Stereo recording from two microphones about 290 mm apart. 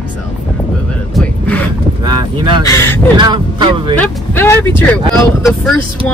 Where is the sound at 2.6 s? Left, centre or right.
Centre.